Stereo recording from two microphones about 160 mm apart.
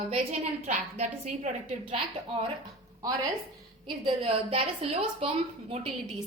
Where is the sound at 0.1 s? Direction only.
45° right (ahead or behind).